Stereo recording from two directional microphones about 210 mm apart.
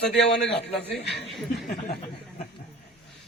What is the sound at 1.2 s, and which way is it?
Speech, centre (ahead or behind).